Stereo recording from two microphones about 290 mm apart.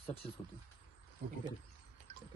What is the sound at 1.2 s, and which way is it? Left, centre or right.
Speech, right.